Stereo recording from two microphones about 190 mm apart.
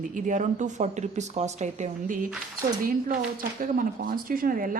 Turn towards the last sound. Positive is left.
turn(degrees=-50)  # may be behind; listen again after turning